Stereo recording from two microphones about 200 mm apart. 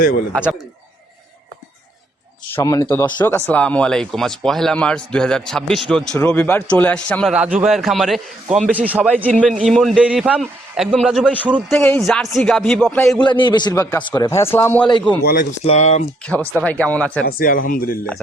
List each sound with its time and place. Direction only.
2.6 s a man's voice: 15° left (ahead or behind)
7.3 s a man's voice: 5° right (ahead or behind)
11.7 s a man's voice: 10° left (ahead or behind)
13.2 s a man's voice: 20° left (ahead or behind)
15.2 s speech: 50° left (ahead or behind)
15.6 s speech: 30° left (ahead or behind)
16.4 s speech: 10° right (ahead or behind)
16.6 s a man's voice: 5° left (ahead or behind)
17.2 s speech: 45° left (ahead or behind)